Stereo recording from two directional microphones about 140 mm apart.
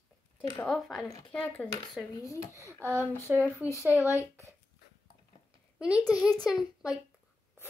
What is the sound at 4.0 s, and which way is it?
Speech, 20° left (ahead or behind).